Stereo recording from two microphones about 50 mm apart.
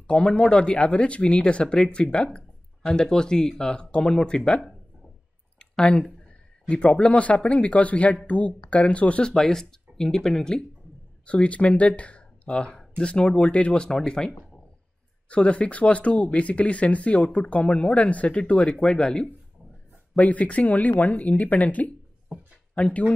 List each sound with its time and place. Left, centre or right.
0.0 s speech: centre
9.3 s speech: centre
11.2 s speech: left
13.8 s speech: centre
20.2 s speech: left